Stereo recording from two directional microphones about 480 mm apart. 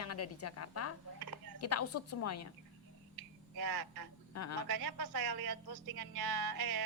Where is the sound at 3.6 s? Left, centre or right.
Right.